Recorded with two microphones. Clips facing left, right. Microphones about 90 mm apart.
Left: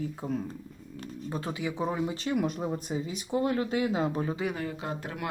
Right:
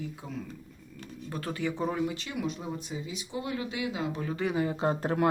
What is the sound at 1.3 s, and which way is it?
Speech, 15° left (ahead or behind).